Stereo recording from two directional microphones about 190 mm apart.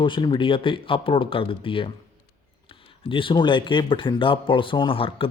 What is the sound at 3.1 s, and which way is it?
Speech, 25° left (ahead or behind).